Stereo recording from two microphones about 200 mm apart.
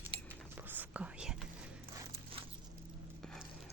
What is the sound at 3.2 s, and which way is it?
Horse, 5° left (ahead or behind).